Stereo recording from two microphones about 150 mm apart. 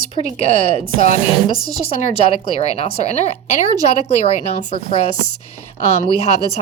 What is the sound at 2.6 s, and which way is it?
A woman's voice, 45° left (ahead or behind).